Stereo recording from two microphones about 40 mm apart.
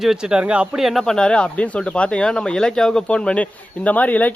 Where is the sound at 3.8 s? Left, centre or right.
Left.